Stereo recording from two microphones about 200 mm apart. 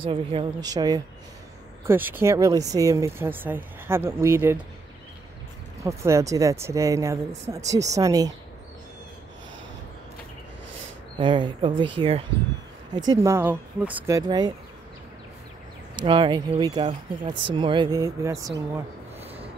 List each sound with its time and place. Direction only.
0.0 s speech: 25° right (ahead or behind)
5.9 s speech: 15° right (ahead or behind)
11.1 s speech: 25° right (ahead or behind)
13.1 s speech: 15° right (ahead or behind)
16.1 s speech: 25° right (ahead or behind)